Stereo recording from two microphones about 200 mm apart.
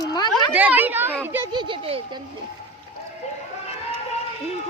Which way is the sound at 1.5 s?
25° right (ahead or behind).